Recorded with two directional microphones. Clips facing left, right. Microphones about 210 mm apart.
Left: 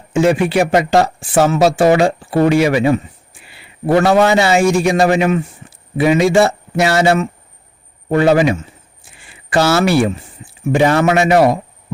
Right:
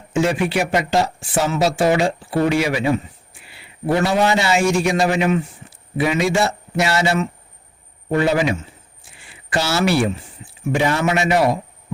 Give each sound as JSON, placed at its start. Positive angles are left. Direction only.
{"t": 0.1, "sound": "a man's voice", "side_deg": 50}
{"t": 2.6, "sound": "a man's voice", "side_deg": 60}
{"t": 9.5, "sound": "a man's voice", "side_deg": 50}